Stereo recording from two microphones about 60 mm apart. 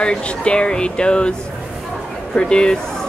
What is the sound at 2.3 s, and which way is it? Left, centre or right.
Speech, centre.